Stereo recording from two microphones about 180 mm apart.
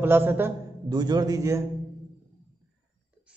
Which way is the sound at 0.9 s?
25° right (ahead or behind).